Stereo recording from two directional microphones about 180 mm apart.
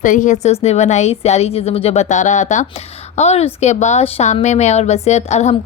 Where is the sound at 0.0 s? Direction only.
45° left (ahead or behind).